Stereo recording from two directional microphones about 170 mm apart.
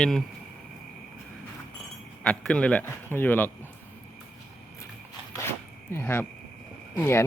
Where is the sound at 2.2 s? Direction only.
5° left (ahead or behind).